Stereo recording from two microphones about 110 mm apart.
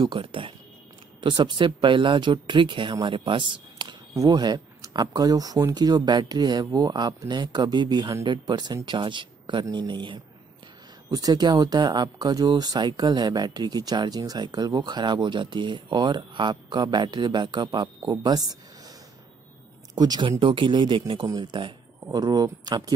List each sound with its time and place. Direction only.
0.0 s speech: 50° right (ahead or behind)
4.1 s speech: 35° right (ahead or behind)
20.0 s speech: 40° right (ahead or behind)